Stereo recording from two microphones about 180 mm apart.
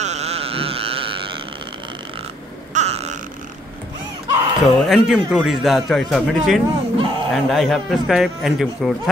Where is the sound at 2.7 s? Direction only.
35° right (ahead or behind).